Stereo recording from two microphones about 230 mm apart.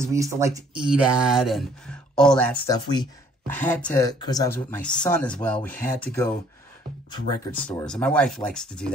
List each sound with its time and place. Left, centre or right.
0.0 s speech: centre
2.7 s speech: centre
7.5 s speech: centre